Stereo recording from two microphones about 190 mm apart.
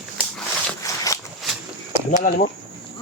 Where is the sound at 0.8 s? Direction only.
15° left (ahead or behind).